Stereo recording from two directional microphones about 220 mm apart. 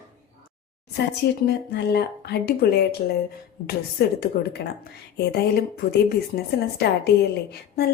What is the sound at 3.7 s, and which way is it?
A woman's voice, 45° left (ahead or behind).